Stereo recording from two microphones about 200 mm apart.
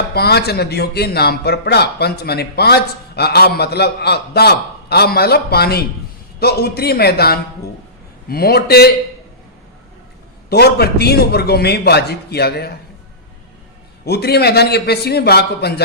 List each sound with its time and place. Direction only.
0.1 s speech: 55° left (ahead or behind)
10.5 s speech: 55° left (ahead or behind)
14.0 s speech: 55° left (ahead or behind)